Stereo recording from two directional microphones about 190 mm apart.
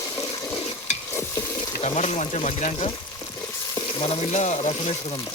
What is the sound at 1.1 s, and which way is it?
Stir, 10° left (ahead or behind).